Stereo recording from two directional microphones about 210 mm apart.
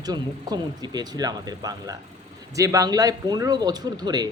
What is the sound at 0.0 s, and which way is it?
A man's voice, 20° right (ahead or behind).